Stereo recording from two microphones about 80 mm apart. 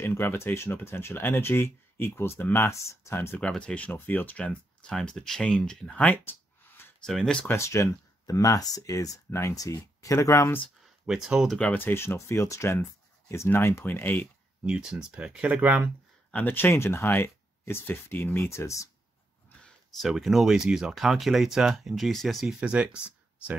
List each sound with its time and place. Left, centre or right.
0.0 s speech: left
3.3 s speech: centre
4.5 s speech: centre
6.2 s a sound: left
7.1 s speech: centre
7.4 s speech: left
11.1 s speech: centre
11.7 s speech: left
14.7 s speech: centre
16.3 s speech: left
19.6 s speech: centre
22.5 s speech: centre